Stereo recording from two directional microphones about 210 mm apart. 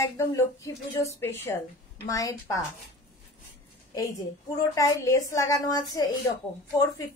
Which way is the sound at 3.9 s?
15° left (ahead or behind).